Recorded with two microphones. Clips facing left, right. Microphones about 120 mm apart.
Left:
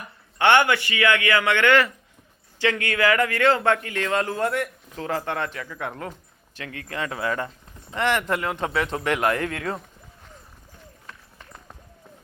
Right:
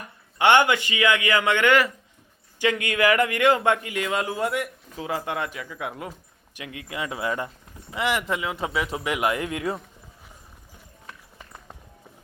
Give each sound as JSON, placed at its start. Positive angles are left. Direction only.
{"t": 0.3, "sound": "a man's voice", "side_deg": -15}